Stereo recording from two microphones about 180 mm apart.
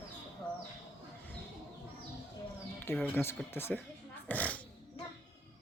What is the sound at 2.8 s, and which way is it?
Speech, 10° left (ahead or behind).